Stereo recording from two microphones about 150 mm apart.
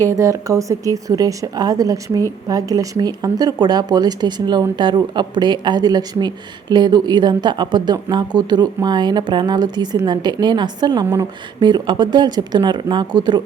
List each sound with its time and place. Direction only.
0.0 s a woman's voice: 20° right (ahead or behind)